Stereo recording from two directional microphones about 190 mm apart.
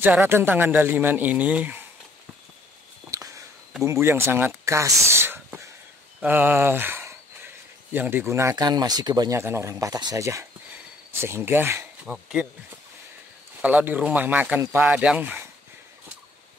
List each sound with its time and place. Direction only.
0.0 s speech: 10° right (ahead or behind)
3.1 s a sound: 15° right (ahead or behind)
3.8 s speech: 15° right (ahead or behind)
4.6 s a sound: 15° right (ahead or behind)
6.2 s speech: 10° right (ahead or behind)
13.6 s speech: 10° right (ahead or behind)